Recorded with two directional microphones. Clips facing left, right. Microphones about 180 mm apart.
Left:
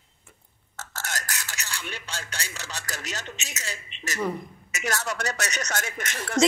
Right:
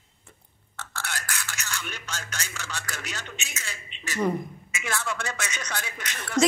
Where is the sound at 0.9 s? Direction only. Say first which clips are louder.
Left 1 dB; 40° left (ahead or behind).